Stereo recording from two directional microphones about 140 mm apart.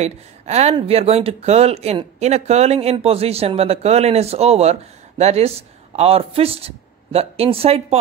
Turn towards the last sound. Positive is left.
turn(degrees=-45)  # may be behind; listen again after turning